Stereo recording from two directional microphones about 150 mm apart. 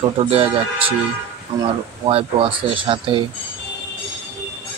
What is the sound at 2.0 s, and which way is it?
Speech, 40° right (ahead or behind).